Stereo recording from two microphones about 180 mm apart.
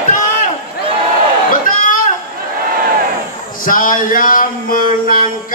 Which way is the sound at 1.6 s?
50° left (ahead or behind).